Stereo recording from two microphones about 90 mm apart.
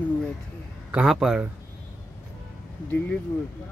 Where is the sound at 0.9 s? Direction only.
5° right (ahead or behind).